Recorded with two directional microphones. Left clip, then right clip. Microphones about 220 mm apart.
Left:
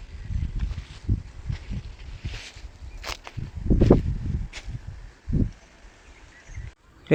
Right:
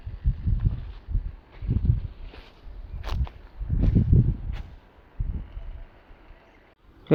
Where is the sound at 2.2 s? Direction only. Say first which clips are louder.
Left 8 dB; 10° left (ahead or behind).